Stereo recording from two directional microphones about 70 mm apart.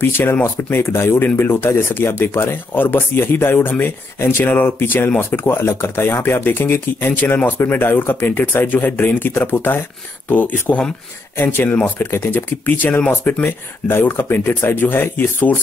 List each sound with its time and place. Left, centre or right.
0.0 s speech: left